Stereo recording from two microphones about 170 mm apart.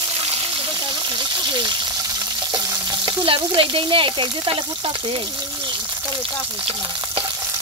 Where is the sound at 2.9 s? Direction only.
25° right (ahead or behind).